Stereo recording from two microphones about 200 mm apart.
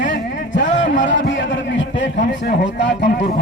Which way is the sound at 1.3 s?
65° left (ahead or behind).